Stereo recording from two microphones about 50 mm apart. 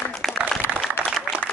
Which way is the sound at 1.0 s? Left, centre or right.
Left.